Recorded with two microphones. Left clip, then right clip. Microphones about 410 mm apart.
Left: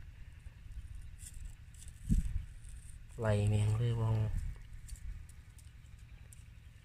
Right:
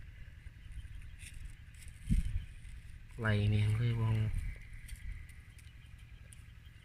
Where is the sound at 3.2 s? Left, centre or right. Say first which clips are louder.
Left 1 dB; centre.